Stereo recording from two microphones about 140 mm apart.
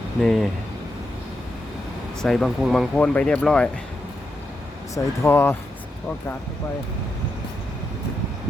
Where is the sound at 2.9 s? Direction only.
10° left (ahead or behind).